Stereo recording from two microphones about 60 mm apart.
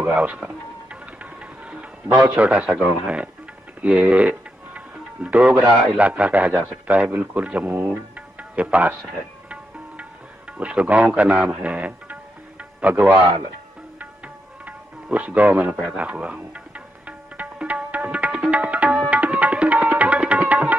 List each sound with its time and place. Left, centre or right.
0.0 s speech: right
1.2 s music: right
3.8 s speech: right
7.8 s music: right
10.6 s speech: right
13.9 s music: right
16.0 s speech: right
17.4 s music: right